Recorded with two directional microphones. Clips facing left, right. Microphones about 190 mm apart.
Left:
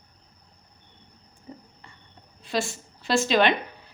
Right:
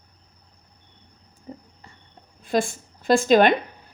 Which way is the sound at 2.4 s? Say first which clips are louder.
Right 5 dB; 50° right (ahead or behind).